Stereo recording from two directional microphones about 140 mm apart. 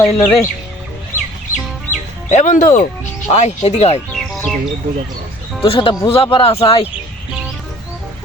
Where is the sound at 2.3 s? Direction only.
60° left (ahead or behind).